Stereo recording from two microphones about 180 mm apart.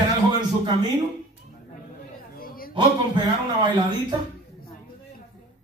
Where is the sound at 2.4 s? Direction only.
55° left (ahead or behind).